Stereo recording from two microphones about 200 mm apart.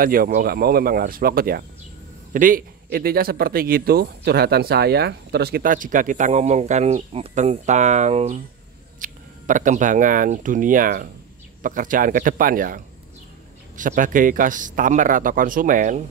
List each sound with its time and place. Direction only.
0.0 s speech: 45° right (ahead or behind)